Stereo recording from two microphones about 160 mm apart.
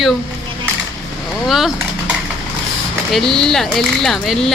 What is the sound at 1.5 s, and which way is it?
Speech, centre (ahead or behind).